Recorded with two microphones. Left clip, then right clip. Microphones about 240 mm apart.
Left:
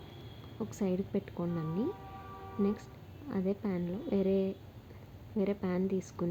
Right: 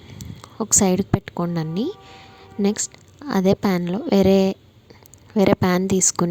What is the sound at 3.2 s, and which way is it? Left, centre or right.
A woman's voice, right.